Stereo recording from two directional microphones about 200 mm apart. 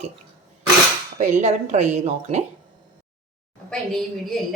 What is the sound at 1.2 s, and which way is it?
A woman's voice, 35° right (ahead or behind).